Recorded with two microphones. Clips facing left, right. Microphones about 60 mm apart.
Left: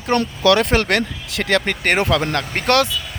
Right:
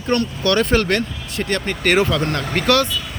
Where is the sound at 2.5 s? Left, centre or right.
Left.